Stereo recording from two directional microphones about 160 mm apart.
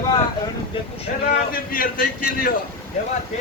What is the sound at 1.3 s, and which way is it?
A man's voice, 65° left (ahead or behind).